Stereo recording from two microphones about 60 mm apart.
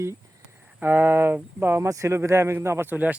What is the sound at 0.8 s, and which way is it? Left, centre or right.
Speech, right.